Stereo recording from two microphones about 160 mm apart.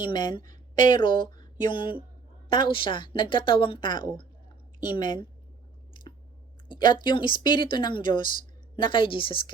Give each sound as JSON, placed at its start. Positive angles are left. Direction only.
{"t": 0.0, "sound": "a woman's voice", "side_deg": 30}
{"t": 6.7, "sound": "a woman's voice", "side_deg": 30}